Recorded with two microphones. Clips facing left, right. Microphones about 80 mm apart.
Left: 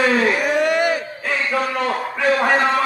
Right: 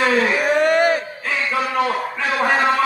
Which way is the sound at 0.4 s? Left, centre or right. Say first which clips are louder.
Right 2 dB; right.